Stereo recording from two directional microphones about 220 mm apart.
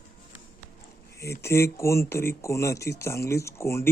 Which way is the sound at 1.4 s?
10° left (ahead or behind).